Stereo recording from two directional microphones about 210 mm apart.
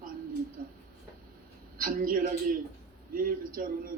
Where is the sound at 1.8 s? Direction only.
45° right (ahead or behind).